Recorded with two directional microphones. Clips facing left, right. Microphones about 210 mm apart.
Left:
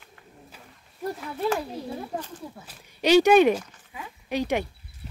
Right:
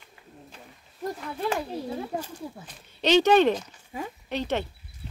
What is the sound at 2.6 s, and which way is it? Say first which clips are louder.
Speech: left 3 dB; 10° left (ahead or behind).